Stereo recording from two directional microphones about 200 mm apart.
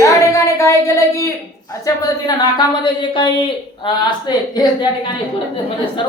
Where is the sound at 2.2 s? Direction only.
20° left (ahead or behind).